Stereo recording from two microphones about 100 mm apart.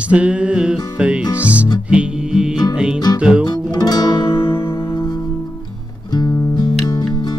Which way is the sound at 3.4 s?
40° left (ahead or behind).